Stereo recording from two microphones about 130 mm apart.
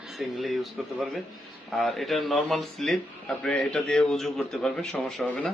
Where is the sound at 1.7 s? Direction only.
Centre (ahead or behind).